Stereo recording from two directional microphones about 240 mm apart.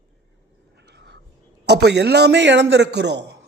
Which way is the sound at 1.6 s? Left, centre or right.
Right.